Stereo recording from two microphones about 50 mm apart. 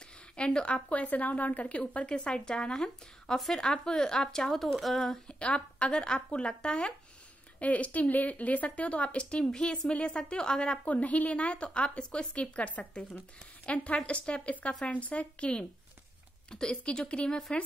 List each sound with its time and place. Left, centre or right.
0.4 s a woman's voice: centre
5.4 s a woman's voice: left
10.9 s a woman's voice: left